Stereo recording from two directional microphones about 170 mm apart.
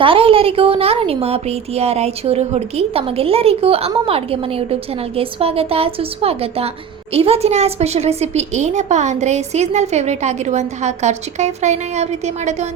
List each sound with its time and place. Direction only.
0.0 s a woman's voice: 30° right (ahead or behind)